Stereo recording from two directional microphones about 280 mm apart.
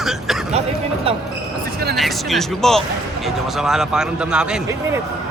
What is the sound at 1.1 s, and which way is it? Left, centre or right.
Basketball bounce, centre.